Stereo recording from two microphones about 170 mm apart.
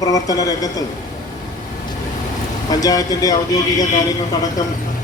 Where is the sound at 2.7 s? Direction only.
20° left (ahead or behind).